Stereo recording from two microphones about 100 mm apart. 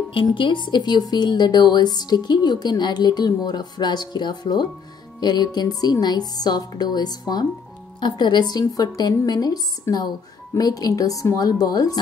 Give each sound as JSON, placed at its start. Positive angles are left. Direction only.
{"t": 0.1, "sound": "a woman's voice", "side_deg": 60}